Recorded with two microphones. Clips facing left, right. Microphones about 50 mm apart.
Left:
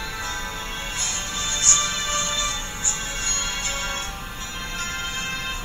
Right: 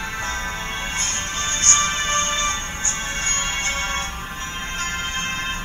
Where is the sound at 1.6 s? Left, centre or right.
Right.